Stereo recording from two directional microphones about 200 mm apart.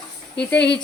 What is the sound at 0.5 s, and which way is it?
Speech, 60° left (ahead or behind).